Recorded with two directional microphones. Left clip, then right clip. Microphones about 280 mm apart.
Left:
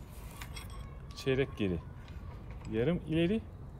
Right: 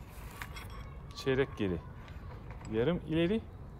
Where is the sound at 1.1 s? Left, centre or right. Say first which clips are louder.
Right 1 dB; centre.